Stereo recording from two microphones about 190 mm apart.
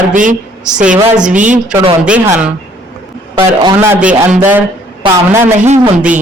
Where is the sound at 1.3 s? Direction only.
40° right (ahead or behind).